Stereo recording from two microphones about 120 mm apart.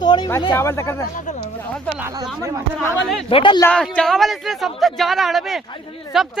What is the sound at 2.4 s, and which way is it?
Speech, 25° right (ahead or behind).